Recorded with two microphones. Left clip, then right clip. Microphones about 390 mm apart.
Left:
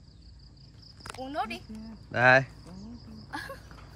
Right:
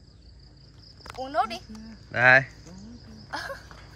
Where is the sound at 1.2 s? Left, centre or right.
Centre.